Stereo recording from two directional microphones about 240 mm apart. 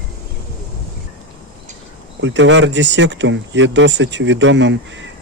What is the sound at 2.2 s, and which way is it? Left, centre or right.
Speech, right.